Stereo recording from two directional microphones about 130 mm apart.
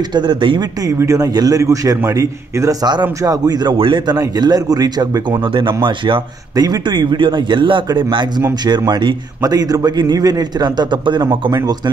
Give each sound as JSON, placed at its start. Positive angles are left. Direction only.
{"t": 0.1, "sound": "a man's voice", "side_deg": -35}
{"t": 0.8, "sound": "a man's voice", "side_deg": -25}
{"t": 4.2, "sound": "a man's voice", "side_deg": -30}
{"t": 5.5, "sound": "a man's voice", "side_deg": -40}